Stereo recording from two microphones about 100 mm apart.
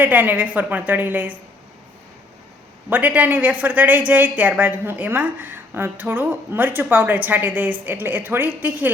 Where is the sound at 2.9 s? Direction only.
15° right (ahead or behind).